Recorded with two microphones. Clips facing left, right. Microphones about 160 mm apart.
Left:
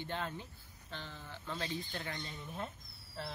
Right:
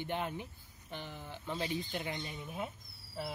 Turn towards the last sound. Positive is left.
turn(degrees=-10)  # may be behind; listen again after turning